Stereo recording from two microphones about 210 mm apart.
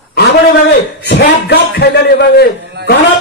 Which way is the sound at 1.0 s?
55° left (ahead or behind).